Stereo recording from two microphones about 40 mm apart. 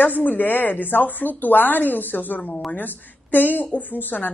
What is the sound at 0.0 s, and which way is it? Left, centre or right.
A woman's voice, left.